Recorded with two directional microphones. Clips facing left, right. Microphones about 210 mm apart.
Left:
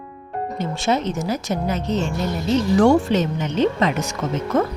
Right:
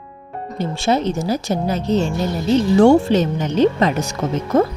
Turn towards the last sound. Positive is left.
turn(degrees=-35)  # may be behind; listen again after turning